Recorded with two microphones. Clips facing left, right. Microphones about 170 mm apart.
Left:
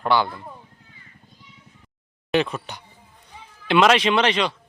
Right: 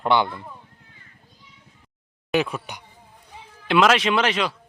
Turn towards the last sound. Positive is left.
turn(degrees=-5)  # may be behind; listen again after turning